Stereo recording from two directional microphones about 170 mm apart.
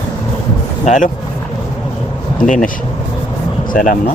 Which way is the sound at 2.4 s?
45° left (ahead or behind).